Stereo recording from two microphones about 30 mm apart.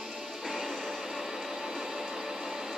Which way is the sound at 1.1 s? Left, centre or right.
Centre.